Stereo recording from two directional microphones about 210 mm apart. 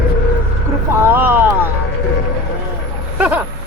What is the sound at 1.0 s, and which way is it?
Speech, 10° right (ahead or behind).